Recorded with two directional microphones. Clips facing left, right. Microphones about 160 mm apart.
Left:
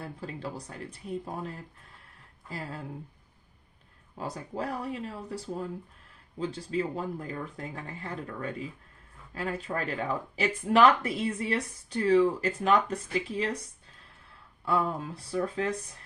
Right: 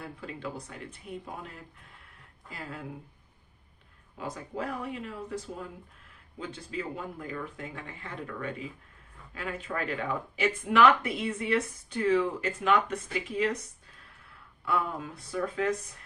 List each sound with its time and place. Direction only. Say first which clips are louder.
0.0 s speech: left 1 dB; 35° left (ahead or behind)
4.2 s speech: left 1 dB; 35° left (ahead or behind)
14.6 s speech: left 2 dB; 30° left (ahead or behind)